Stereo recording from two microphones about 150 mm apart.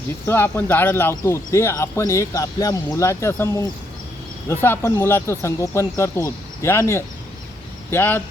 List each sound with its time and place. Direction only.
0.3 s speech: 15° left (ahead or behind)